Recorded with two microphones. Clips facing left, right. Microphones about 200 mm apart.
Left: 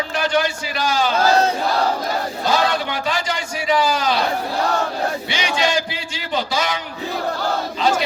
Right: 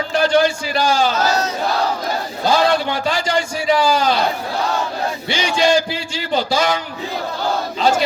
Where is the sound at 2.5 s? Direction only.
30° right (ahead or behind).